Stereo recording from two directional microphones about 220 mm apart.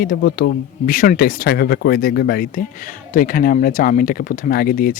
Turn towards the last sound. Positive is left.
turn(degrees=40)  # may be behind; listen again after turning